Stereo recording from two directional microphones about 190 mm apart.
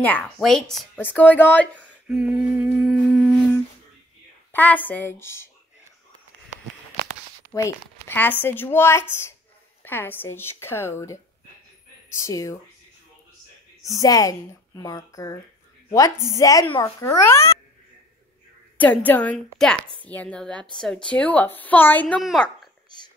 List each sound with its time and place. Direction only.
0.0 s a woman's voice: 5° left (ahead or behind)
1.8 s a sound: 5° right (ahead or behind)
2.5 s humming: 5° right (ahead or behind)
4.5 s a woman's voice: 10° left (ahead or behind)
8.1 s a woman's voice: 10° left (ahead or behind)
12.3 s a woman's voice: 15° left (ahead or behind)
13.8 s a woman's voice: 20° left (ahead or behind)
18.8 s a woman's voice: 10° left (ahead or behind)